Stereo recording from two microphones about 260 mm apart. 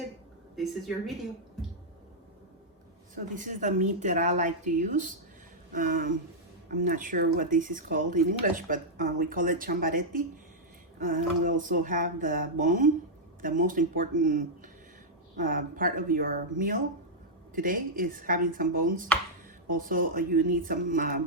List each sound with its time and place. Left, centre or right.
0.5 s speech: centre
3.3 s speech: right